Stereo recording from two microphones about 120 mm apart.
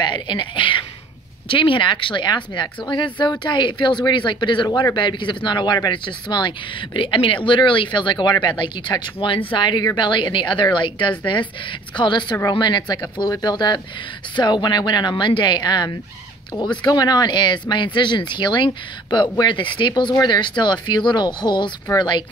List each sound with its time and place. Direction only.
0.0 s speech: 40° left (ahead or behind)